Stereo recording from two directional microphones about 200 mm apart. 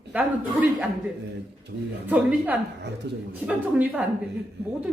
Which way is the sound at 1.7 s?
60° right (ahead or behind).